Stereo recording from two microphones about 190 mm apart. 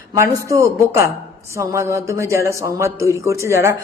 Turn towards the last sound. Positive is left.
turn(degrees=-15)  # may be behind; listen again after turning